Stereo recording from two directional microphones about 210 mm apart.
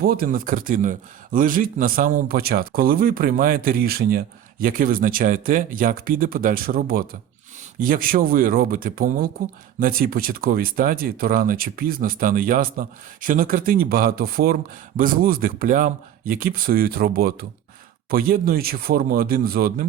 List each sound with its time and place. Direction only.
0.0 s speech: 45° right (ahead or behind)